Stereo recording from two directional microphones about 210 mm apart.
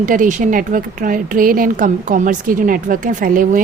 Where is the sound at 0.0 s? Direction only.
40° right (ahead or behind).